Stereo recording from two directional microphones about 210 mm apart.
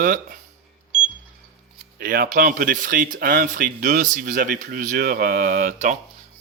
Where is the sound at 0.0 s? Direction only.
40° right (ahead or behind).